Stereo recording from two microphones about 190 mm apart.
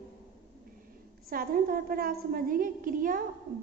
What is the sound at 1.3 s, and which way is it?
A woman's voice, 50° right (ahead or behind).